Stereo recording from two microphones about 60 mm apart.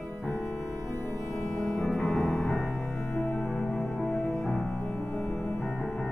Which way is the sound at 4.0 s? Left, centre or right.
Centre.